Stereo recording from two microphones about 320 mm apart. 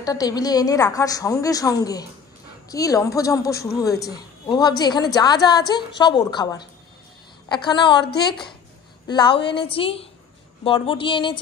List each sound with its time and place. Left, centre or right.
0.0 s a woman's voice: centre
9.0 s a woman's voice: centre
9.3 s a woman's voice: left
9.6 s a woman's voice: centre